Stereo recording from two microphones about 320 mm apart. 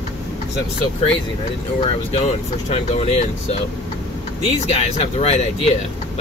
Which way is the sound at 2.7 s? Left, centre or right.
Centre.